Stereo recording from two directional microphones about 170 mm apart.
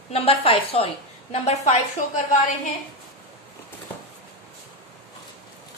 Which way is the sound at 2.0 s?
50° left (ahead or behind).